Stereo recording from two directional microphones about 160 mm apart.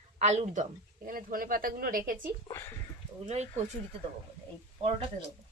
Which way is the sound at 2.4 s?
20° left (ahead or behind).